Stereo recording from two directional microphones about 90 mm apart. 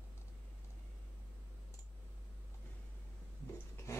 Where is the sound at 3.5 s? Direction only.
30° left (ahead or behind).